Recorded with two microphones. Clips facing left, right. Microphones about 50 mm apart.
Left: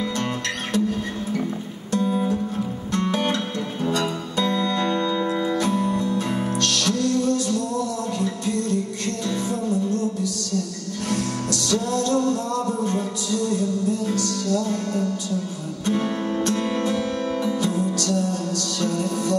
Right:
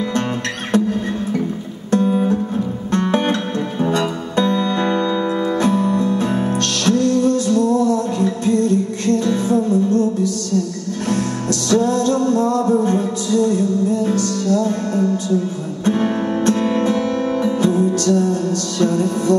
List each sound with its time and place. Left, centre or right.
0.7 s music: right